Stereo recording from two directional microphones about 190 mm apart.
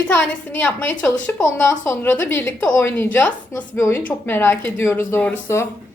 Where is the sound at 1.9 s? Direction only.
15° left (ahead or behind).